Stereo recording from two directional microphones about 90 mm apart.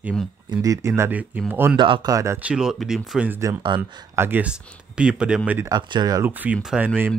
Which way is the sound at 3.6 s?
65° right (ahead or behind).